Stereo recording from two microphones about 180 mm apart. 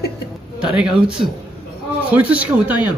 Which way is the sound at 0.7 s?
5° right (ahead or behind).